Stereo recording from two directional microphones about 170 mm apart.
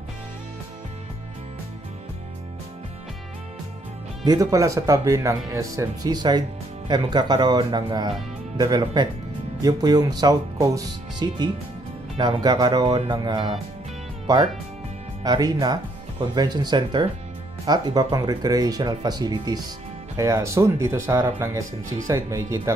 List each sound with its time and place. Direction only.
4.2 s speech: 20° right (ahead or behind)